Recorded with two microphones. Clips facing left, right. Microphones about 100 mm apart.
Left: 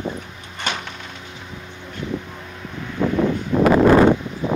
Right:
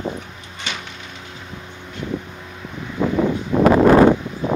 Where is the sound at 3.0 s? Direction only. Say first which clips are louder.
Even; 15° right (ahead or behind).